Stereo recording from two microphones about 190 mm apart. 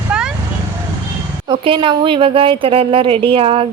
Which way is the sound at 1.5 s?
25° right (ahead or behind).